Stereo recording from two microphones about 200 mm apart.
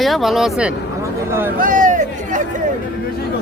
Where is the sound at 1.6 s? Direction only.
40° right (ahead or behind).